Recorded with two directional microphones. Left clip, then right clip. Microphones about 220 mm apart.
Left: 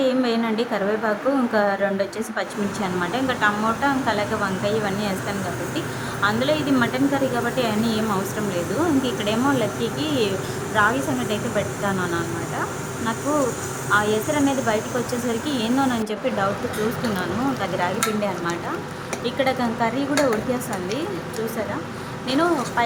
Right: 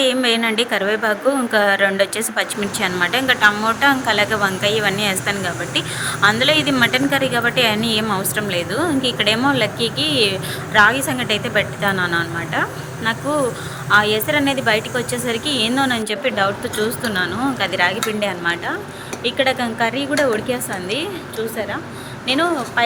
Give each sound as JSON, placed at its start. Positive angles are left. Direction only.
{"t": 0.0, "sound": "a woman's voice", "side_deg": -20}
{"t": 13.9, "sound": "a woman's voice", "side_deg": -15}
{"t": 22.3, "sound": "a woman's voice", "side_deg": -10}